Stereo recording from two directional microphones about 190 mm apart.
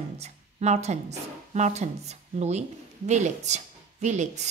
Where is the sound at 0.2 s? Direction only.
35° right (ahead or behind).